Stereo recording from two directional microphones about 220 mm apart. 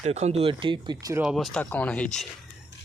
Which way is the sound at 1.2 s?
Centre (ahead or behind).